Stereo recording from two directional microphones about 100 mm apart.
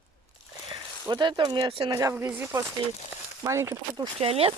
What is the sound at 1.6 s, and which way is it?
Speech, 60° right (ahead or behind).